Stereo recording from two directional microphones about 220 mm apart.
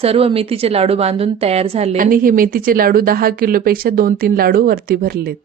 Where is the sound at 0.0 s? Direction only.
25° right (ahead or behind).